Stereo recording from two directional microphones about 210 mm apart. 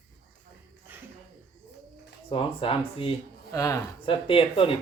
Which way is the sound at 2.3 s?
25° left (ahead or behind).